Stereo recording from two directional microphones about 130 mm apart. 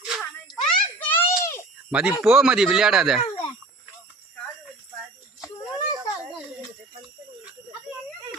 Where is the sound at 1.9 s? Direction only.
10° right (ahead or behind).